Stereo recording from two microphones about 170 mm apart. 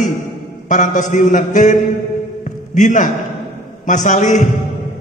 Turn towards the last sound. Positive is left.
turn(degrees=45)  # may be behind; listen again after turning